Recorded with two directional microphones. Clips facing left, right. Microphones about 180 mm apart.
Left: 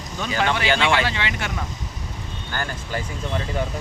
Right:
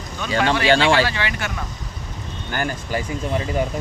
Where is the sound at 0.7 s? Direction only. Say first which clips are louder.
Right 6 dB; 30° right (ahead or behind).